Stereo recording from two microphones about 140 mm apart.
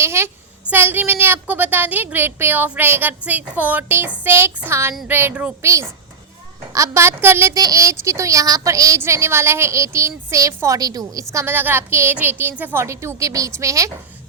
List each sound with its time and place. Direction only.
0.0 s a sound: 20° right (ahead or behind)
0.6 s a woman's voice: 15° right (ahead or behind)
5.6 s a woman's voice: 20° right (ahead or behind)